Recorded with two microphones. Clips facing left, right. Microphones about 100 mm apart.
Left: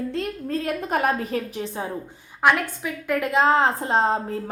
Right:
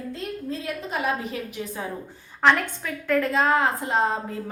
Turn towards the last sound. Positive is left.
turn(degrees=30)  # may be behind; listen again after turning